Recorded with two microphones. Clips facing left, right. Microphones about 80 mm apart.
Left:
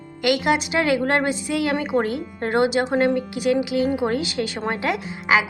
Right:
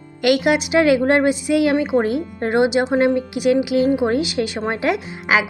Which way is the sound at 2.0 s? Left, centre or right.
Right.